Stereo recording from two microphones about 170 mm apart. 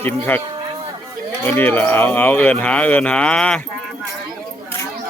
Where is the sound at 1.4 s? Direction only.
10° left (ahead or behind).